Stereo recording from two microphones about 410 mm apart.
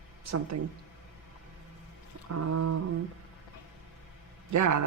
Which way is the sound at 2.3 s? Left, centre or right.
Right.